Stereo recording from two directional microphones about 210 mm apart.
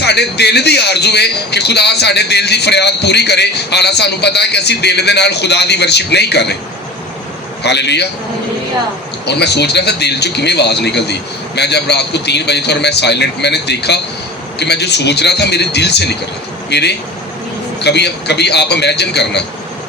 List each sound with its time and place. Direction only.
0.0 s a man's voice: 55° left (ahead or behind)
7.6 s a man's voice: 55° left (ahead or behind)
9.2 s a man's voice: 50° left (ahead or behind)